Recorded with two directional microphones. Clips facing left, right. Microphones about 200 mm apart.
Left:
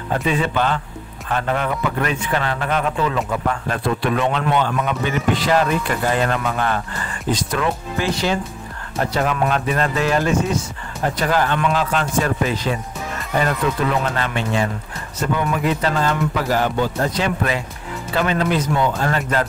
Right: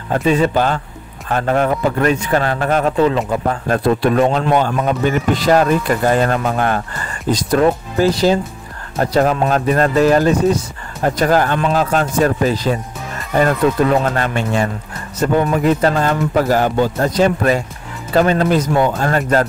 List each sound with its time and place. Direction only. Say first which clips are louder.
0.1 s a man's voice: right 6 dB; 40° right (ahead or behind)